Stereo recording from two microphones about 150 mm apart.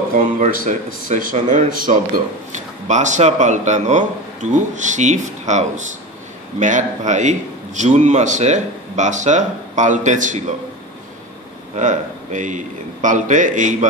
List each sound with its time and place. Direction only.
0.1 s speech: 60° right (ahead or behind)
2.9 s a man's voice: 55° right (ahead or behind)
11.7 s speech: 55° right (ahead or behind)